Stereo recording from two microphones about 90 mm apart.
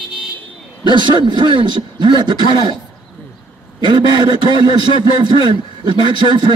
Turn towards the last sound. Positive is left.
turn(degrees=-60)  # may be behind; listen again after turning